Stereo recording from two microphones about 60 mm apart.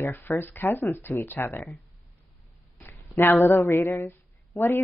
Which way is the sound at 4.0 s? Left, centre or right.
Left.